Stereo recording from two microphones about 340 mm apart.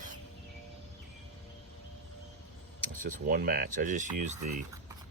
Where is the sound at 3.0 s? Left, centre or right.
Right.